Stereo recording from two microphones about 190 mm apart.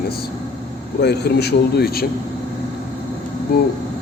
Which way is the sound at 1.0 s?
60° left (ahead or behind).